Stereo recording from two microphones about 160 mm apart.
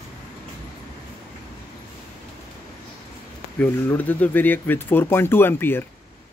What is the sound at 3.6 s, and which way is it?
Speech, 10° left (ahead or behind).